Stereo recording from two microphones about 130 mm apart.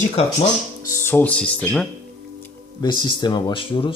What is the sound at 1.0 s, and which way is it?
Speech, 15° left (ahead or behind).